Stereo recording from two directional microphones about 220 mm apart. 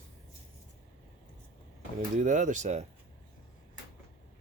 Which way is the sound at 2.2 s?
35° right (ahead or behind).